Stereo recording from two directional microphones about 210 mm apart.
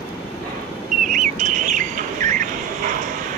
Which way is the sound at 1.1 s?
35° right (ahead or behind).